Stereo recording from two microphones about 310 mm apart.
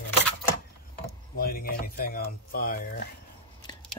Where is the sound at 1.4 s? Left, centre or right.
Left.